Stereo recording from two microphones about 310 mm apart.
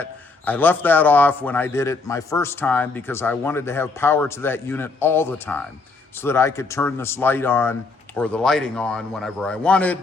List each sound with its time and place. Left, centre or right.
0.0 s a man's voice: centre